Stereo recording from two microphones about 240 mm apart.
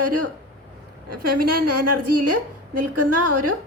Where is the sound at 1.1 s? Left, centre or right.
Right.